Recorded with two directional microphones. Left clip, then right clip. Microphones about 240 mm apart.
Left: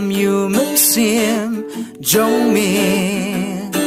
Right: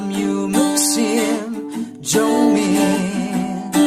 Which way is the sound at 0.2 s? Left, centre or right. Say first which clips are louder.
Left 2 dB; left.